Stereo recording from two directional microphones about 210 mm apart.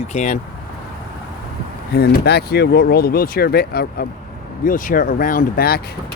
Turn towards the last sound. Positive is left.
turn(degrees=45)  # may be behind; listen again after turning